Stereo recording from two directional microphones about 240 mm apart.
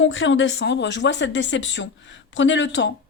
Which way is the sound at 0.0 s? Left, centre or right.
Left.